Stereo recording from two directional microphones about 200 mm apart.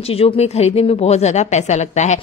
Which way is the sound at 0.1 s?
30° left (ahead or behind).